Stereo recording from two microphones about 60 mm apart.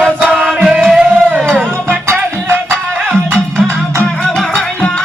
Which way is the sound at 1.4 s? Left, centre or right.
Right.